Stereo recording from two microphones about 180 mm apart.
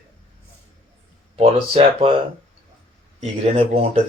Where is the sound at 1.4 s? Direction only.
30° right (ahead or behind).